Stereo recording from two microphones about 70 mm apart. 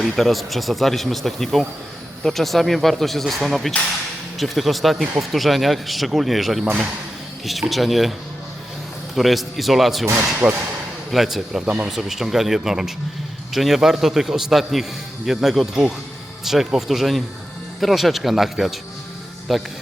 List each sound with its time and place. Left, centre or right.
0.0 s speech: centre
7.7 s speech: centre
9.1 s speech: centre
10.4 s speech: centre
11.1 s speech: centre